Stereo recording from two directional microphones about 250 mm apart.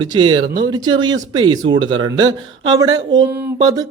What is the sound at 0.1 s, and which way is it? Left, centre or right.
Speech, centre.